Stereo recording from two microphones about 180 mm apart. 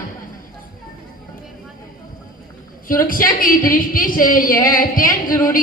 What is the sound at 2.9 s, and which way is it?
A woman's voice, 50° left (ahead or behind).